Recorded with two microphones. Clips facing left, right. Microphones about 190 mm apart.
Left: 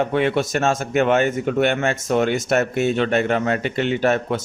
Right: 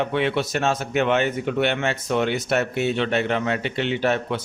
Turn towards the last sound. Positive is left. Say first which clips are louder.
# left 3 dB
turn(degrees=45)  # may be behind; listen again after turning